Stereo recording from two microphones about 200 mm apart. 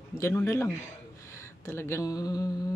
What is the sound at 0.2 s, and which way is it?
Speech, 15° left (ahead or behind).